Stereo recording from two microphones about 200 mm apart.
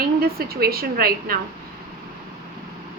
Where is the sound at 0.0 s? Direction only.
50° right (ahead or behind).